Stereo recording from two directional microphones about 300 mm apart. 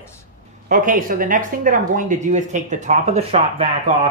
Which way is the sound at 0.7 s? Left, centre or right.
Right.